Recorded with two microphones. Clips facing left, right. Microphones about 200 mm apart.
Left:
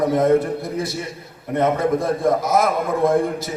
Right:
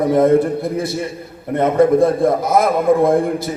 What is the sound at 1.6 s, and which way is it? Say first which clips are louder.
A man's voice: right 6 dB; 55° right (ahead or behind).